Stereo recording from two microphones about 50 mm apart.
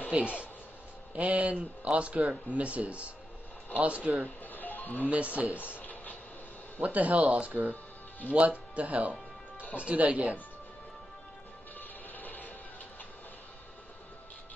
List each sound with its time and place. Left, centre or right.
0.1 s speech: right
4.5 s livestock: left
5.0 s speech: right
5.8 s a sound: left
6.8 s speech: right
12.2 s music: left